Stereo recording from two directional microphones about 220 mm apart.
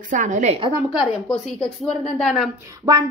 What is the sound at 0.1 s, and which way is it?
Speech, 35° right (ahead or behind).